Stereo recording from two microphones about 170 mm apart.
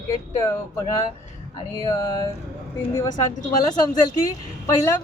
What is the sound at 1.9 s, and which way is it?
Speech, 20° left (ahead or behind).